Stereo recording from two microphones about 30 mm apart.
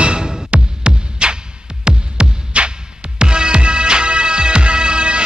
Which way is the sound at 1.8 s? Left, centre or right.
Right.